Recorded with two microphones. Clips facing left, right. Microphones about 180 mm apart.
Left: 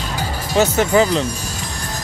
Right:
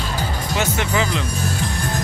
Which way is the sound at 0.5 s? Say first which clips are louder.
Left 8 dB; 40° left (ahead or behind).